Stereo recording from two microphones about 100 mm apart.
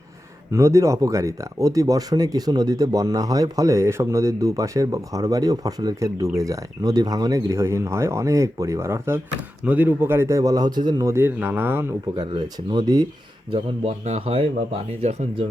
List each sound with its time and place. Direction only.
0.5 s speech: 30° right (ahead or behind); by 11.0 s 45° right (ahead or behind)
11.0 s speech: 25° right (ahead or behind)
12.5 s speech: 40° right (ahead or behind)
13.5 s a man's voice: 75° right (ahead or behind)